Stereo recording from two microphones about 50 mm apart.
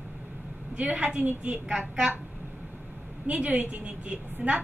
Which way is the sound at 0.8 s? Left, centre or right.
Right.